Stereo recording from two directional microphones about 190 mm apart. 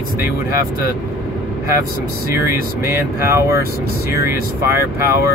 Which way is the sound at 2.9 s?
15° right (ahead or behind).